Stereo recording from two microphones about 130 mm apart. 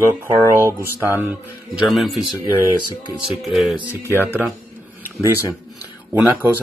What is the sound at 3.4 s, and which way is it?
Speech, centre (ahead or behind).